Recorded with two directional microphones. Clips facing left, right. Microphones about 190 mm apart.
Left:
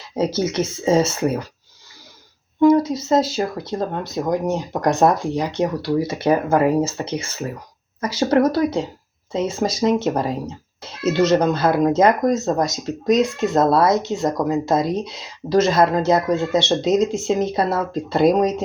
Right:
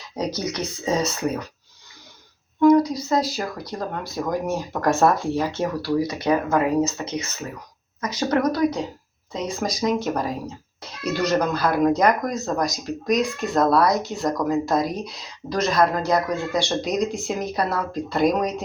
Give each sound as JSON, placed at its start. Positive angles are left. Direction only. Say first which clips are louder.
{"t": 0.2, "sound": "speech", "louder": "left 6 dB", "side_deg": 25}
{"t": 2.6, "sound": "speech", "louder": "left 1 dB", "side_deg": 30}